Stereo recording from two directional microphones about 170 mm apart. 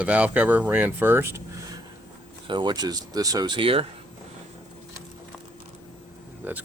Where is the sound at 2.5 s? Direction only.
25° right (ahead or behind).